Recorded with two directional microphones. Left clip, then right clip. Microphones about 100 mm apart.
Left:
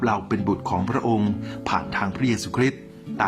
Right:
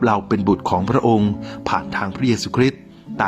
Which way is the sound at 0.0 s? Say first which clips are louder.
Right 6 dB; 35° right (ahead or behind).